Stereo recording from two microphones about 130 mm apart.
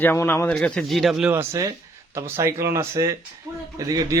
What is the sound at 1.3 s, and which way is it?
Speech, 20° right (ahead or behind).